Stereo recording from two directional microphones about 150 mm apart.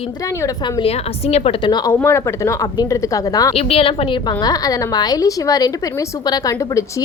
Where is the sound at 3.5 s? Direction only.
40° left (ahead or behind).